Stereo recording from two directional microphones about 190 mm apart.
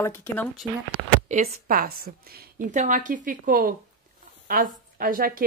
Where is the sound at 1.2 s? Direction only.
40° right (ahead or behind).